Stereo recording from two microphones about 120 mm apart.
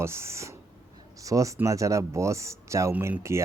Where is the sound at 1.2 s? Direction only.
30° right (ahead or behind).